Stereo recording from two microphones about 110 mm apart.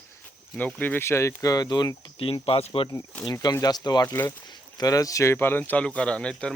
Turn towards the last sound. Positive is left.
turn(degrees=10)  # may be behind; listen again after turning